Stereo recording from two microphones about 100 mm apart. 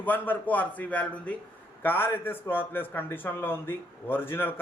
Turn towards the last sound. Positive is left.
turn(degrees=20)  # may be behind; listen again after turning